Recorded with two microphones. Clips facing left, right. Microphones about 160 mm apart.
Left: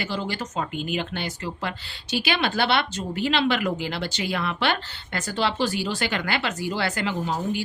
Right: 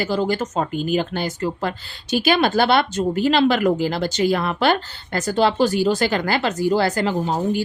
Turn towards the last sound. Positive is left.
turn(degrees=-40)  # may be behind; listen again after turning